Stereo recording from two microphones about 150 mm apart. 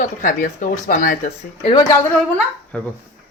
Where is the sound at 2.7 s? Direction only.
10° left (ahead or behind).